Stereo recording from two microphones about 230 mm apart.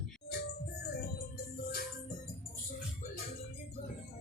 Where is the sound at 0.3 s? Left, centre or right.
Left.